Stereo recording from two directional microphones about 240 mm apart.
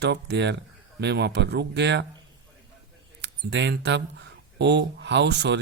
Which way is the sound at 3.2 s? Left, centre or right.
Right.